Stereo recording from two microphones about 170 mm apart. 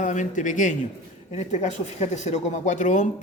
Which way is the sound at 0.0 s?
45° left (ahead or behind).